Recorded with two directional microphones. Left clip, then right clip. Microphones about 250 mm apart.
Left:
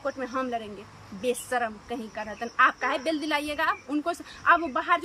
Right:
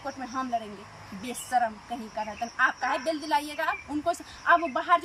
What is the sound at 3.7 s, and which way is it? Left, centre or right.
A woman's voice, centre.